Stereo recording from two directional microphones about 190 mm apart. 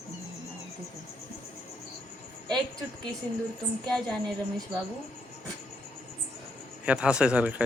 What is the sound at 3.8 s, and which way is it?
Speech, 5° left (ahead or behind).